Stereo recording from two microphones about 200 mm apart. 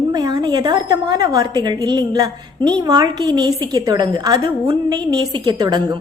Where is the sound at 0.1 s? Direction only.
20° right (ahead or behind).